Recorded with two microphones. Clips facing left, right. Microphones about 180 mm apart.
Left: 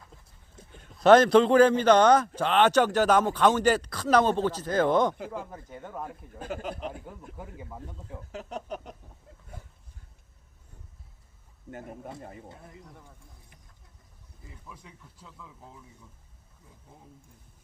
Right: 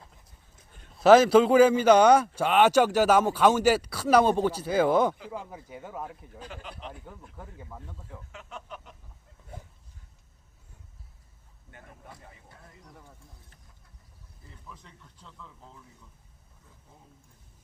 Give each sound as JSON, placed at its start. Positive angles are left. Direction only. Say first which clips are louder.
{"t": 0.6, "sound": "a sound", "louder": "left 11 dB", "side_deg": 30}
{"t": 0.9, "sound": "a man's voice", "louder": "right 1 dB", "side_deg": -5}
{"t": 6.4, "sound": "speech", "louder": "left 8 dB", "side_deg": 45}
{"t": 7.0, "sound": "speech", "louder": "left 3 dB", "side_deg": 10}
{"t": 8.3, "sound": "speech", "louder": "left 9 dB", "side_deg": 40}
{"t": 11.7, "sound": "speech", "louder": "left 10 dB", "side_deg": 40}
{"t": 14.5, "sound": "speech", "louder": "left 1 dB", "side_deg": 10}